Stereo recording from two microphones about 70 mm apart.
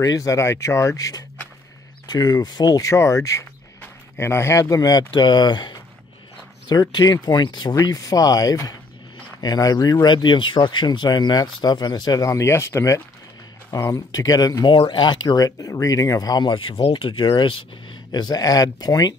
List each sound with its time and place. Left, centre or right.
0.0 s speech: left
2.0 s speech: left
2.8 s speech: left
6.7 s speech: left
7.7 s speech: left
12.3 s speech: left
18.3 s speech: left